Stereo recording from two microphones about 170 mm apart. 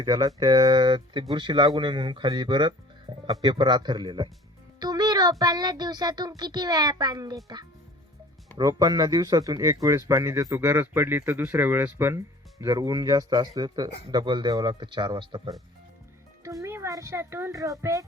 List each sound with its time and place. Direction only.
0.0 s speech: 25° right (ahead or behind)
3.1 s music: 20° right (ahead or behind)
3.4 s speech: 25° right (ahead or behind)